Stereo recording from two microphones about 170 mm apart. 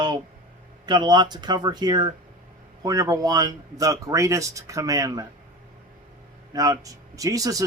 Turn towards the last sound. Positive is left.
turn(degrees=-20)  # may be behind; listen again after turning